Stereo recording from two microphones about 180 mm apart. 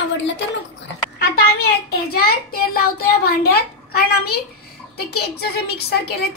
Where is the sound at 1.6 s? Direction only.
55° left (ahead or behind).